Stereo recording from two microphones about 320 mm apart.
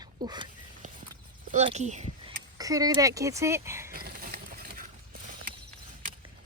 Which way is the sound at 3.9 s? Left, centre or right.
Right.